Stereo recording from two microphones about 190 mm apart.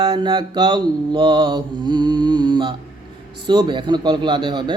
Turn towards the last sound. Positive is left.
turn(degrees=-25)  # may be behind; listen again after turning